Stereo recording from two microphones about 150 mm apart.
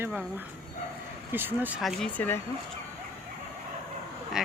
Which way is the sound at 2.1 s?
15° left (ahead or behind).